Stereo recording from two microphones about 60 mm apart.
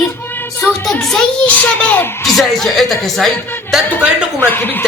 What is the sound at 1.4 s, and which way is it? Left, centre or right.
Speech, left.